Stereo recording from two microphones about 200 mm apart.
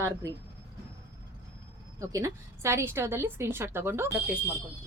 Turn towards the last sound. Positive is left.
turn(degrees=-10)  # may be behind; listen again after turning